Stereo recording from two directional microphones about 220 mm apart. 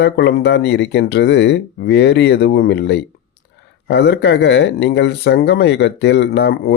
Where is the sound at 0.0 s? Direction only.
50° left (ahead or behind).